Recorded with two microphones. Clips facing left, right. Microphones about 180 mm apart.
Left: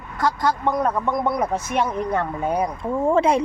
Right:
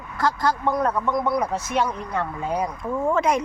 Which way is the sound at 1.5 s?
55° left (ahead or behind).